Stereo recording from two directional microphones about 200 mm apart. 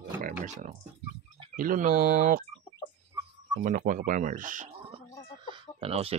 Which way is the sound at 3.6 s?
45° right (ahead or behind).